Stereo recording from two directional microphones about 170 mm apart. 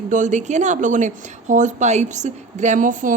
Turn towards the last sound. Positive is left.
turn(degrees=-50)  # may be behind; listen again after turning